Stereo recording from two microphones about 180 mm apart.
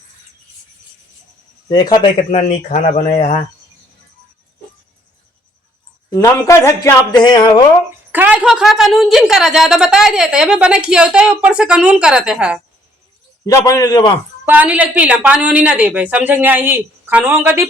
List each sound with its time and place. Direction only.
1.7 s speech: 25° left (ahead or behind)
2.3 s speech: 40° left (ahead or behind)
6.1 s speech: 20° left (ahead or behind)
8.1 s a woman's voice: 10° right (ahead or behind)
13.4 s speech: 15° left (ahead or behind)
14.4 s a woman's voice: 10° right (ahead or behind)